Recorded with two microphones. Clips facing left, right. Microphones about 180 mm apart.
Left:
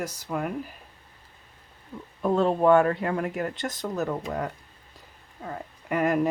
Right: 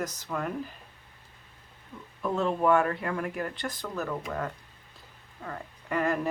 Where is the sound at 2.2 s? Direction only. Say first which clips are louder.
Left 5 dB; 35° left (ahead or behind).